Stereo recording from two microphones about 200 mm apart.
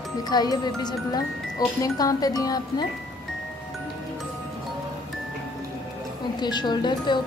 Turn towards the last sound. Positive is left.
turn(degrees=20)  # may be behind; listen again after turning